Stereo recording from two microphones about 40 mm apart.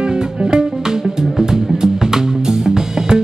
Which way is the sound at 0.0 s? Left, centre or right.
Centre.